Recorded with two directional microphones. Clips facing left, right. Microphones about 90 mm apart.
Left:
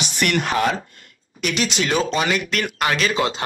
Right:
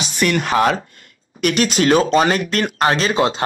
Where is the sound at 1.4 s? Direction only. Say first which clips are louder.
Right 7 dB; 50° right (ahead or behind); by 3.4 s 30° right (ahead or behind).